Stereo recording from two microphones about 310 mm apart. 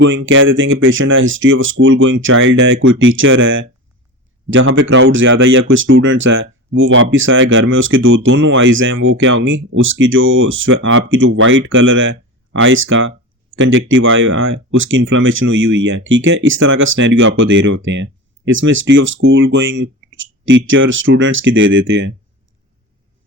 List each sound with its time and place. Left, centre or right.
0.0 s speech: right